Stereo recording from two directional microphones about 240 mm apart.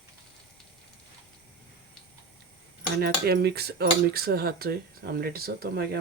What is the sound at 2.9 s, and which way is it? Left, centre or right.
Cutlery, right.